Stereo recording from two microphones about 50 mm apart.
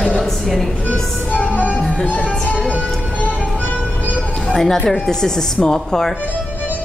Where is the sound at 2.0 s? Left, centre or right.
Left.